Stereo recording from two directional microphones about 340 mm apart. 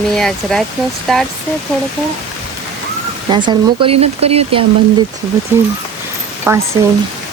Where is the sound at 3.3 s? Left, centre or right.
Centre.